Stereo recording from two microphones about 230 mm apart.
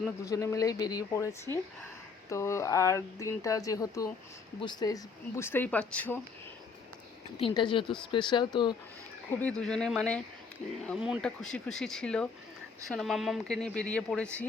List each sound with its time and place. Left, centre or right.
0.3 s speech: centre
7.3 s speech: left
9.4 s speech: centre